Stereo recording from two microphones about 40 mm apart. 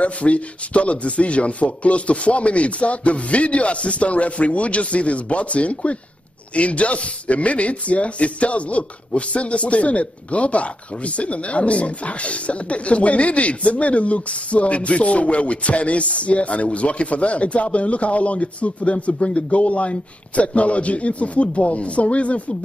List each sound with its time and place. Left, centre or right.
0.0 s speech: left